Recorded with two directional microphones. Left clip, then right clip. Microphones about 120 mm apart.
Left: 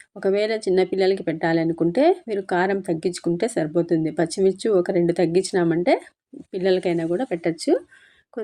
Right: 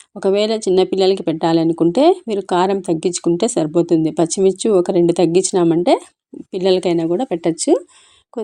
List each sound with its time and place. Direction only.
0.2 s speech: 20° right (ahead or behind)